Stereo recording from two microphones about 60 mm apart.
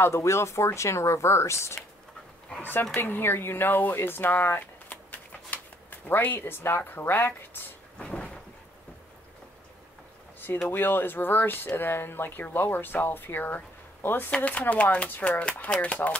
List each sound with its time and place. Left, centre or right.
0.0 s speech: left
2.6 s speech: left
8.0 s cupboard open or close: centre
10.7 s speech: left
14.3 s speech: left